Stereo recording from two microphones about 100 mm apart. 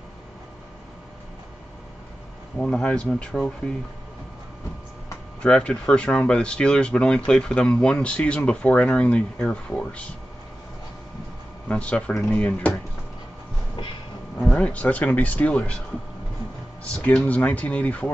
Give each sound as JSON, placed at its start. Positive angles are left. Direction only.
{"t": 2.6, "sound": "speech", "side_deg": 10}
{"t": 5.4, "sound": "speech", "side_deg": 10}
{"t": 11.6, "sound": "speech", "side_deg": 10}
{"t": 14.4, "sound": "speech", "side_deg": 10}
{"t": 16.9, "sound": "speech", "side_deg": 10}